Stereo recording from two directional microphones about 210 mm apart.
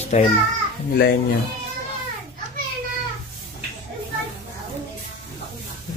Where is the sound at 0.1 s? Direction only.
35° left (ahead or behind).